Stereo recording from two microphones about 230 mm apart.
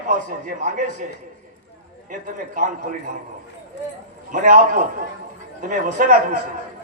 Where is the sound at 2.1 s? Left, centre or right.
Right.